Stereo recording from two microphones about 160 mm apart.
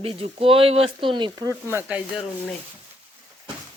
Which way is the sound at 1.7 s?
15° right (ahead or behind).